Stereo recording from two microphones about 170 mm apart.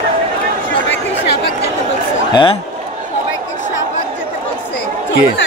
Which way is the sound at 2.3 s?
30° left (ahead or behind).